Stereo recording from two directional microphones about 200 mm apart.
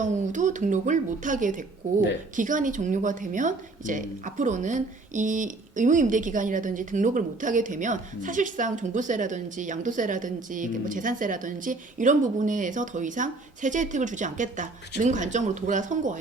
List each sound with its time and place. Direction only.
0.0 s a woman's voice: 40° right (ahead or behind)